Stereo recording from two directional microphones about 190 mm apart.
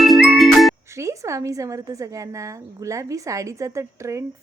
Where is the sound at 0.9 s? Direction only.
15° right (ahead or behind).